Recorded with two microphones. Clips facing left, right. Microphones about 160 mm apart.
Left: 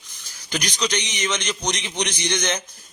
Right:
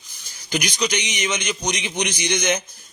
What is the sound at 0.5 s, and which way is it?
A man's voice, 10° right (ahead or behind).